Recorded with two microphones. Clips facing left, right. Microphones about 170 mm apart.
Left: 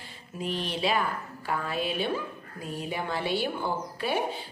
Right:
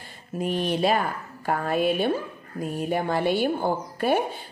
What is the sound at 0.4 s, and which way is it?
Speech, 50° right (ahead or behind).